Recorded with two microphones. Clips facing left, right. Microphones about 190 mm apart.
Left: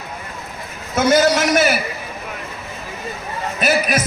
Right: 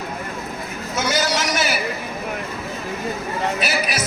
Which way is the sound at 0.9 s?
55° left (ahead or behind).